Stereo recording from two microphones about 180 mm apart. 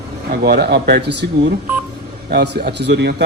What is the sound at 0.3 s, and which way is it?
A man's voice, 60° right (ahead or behind).